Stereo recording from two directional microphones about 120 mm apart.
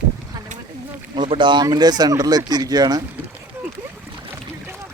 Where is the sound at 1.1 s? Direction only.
45° right (ahead or behind).